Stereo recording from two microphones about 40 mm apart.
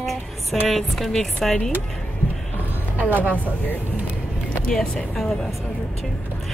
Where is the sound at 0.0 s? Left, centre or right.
Centre.